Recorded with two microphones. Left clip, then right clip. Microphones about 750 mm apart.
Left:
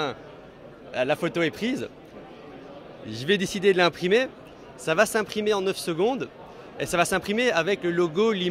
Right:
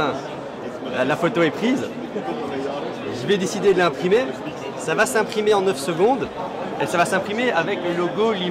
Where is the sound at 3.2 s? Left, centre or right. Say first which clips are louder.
Right 3 dB; left.